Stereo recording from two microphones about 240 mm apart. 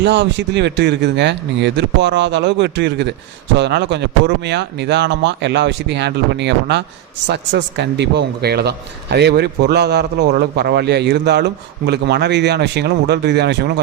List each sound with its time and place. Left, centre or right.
0.0 s a man's voice: right